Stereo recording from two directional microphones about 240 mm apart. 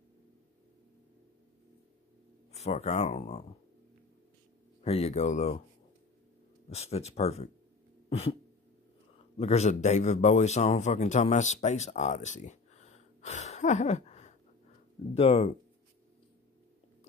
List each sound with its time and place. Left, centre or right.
2.5 s speech: left
4.8 s speech: left
6.7 s speech: left
8.1 s a sound: left
9.4 s a man's voice: left